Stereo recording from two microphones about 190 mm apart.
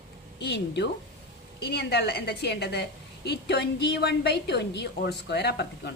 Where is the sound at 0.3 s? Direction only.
65° left (ahead or behind).